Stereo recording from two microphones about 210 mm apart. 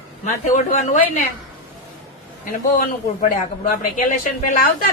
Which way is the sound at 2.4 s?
40° left (ahead or behind).